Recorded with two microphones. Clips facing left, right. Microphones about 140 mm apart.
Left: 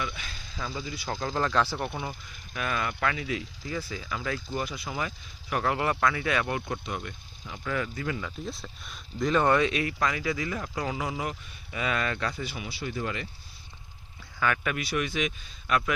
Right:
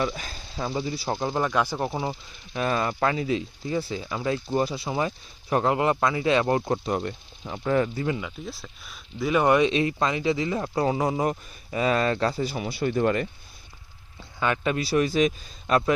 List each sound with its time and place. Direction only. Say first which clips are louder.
0.0 s speech: right 7 dB; 40° right (ahead or behind); by 1.8 s 15° right (ahead or behind)
1.8 s speech: right 5 dB; 25° right (ahead or behind)
8.4 s speech: even; centre (ahead or behind); by 13.2 s 50° right (ahead or behind)
14.3 s speech: right 4 dB; 25° right (ahead or behind)